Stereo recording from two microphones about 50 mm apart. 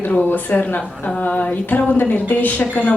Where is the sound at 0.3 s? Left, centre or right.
Left.